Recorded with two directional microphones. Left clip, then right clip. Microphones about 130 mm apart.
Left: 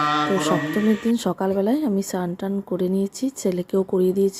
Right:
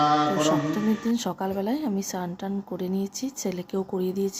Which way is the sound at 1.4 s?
45° left (ahead or behind).